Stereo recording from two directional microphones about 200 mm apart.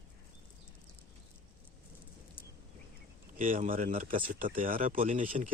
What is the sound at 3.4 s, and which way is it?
Speech, 40° right (ahead or behind).